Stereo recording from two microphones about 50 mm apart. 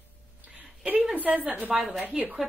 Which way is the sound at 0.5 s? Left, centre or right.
Right.